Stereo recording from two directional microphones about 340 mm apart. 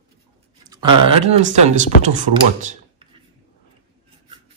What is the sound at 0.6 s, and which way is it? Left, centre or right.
Speech, centre.